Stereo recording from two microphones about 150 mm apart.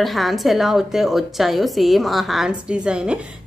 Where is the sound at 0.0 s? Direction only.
Centre (ahead or behind).